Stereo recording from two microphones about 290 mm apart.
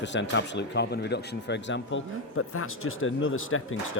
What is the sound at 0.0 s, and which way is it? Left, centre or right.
Speech, left.